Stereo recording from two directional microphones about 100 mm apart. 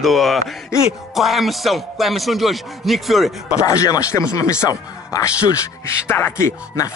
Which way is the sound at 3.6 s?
35° left (ahead or behind).